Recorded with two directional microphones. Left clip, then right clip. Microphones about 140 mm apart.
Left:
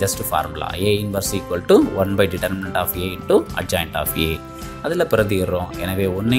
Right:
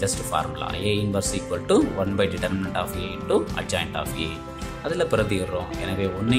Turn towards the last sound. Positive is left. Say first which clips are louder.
# left 5 dB
turn(degrees=35)  # may be behind; listen again after turning